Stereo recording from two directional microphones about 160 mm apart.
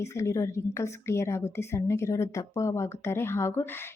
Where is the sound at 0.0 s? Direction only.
15° left (ahead or behind).